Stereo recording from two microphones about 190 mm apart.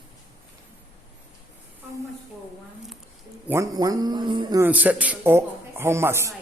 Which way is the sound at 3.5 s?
15° right (ahead or behind).